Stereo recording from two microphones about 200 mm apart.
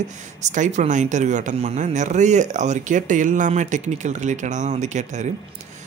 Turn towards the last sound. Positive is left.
turn(degrees=-35)  # may be behind; listen again after turning